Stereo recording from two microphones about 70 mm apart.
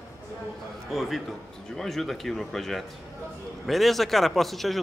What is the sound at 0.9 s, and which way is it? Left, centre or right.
A man's voice, centre.